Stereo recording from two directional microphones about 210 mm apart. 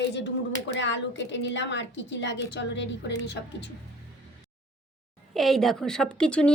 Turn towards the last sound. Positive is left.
turn(degrees=5)  # may be behind; listen again after turning